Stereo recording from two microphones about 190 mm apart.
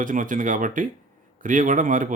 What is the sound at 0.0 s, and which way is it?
Speech, 45° right (ahead or behind).